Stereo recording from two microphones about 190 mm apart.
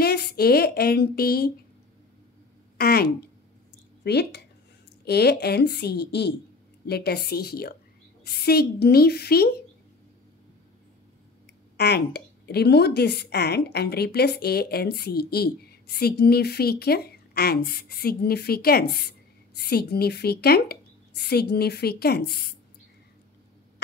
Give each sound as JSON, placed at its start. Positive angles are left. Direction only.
{"t": 0.0, "sound": "a woman's voice", "side_deg": 55}
{"t": 2.8, "sound": "a woman's voice", "side_deg": 55}
{"t": 11.7, "sound": "a woman's voice", "side_deg": 60}